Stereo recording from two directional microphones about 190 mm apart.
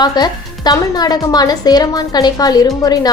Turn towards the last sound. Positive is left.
turn(degrees=20)  # may be behind; listen again after turning